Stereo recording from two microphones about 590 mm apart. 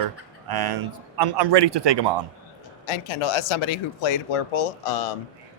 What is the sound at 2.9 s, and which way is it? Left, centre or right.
Speech, left.